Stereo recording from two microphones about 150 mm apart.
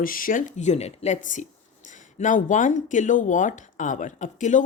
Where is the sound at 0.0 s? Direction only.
70° left (ahead or behind).